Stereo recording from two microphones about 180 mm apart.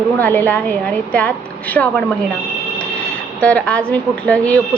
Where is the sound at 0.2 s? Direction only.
10° left (ahead or behind).